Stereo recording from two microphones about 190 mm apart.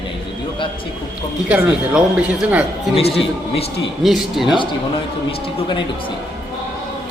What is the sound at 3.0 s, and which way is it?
Speech, 30° left (ahead or behind).